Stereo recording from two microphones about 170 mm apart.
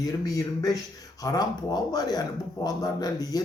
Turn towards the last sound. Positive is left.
turn(degrees=20)  # may be behind; listen again after turning